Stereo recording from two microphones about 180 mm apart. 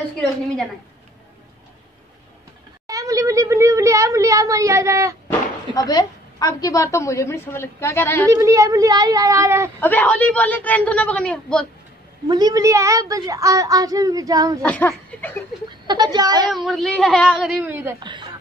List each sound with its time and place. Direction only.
2.9 s speech: 20° right (ahead or behind)
5.8 s a woman's voice: 20° left (ahead or behind)
8.3 s speech: 15° right (ahead or behind)
9.8 s a woman's voice: 10° left (ahead or behind)
12.3 s a woman's voice: 20° right (ahead or behind)
14.6 s a woman's voice: 10° left (ahead or behind)
15.9 s a woman's voice: 25° right (ahead or behind)
16.4 s speech: centre (ahead or behind)